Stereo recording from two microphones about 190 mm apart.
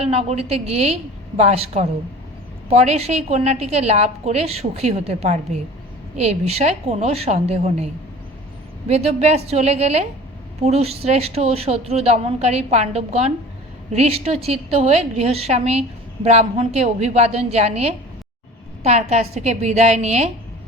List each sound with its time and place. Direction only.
0.0 s a woman's voice: 35° right (ahead or behind)
8.9 s a woman's voice: 35° right (ahead or behind)